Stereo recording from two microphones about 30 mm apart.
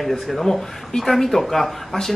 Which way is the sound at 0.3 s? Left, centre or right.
Centre.